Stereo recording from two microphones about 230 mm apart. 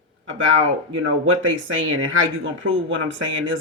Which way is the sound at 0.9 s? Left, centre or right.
Right.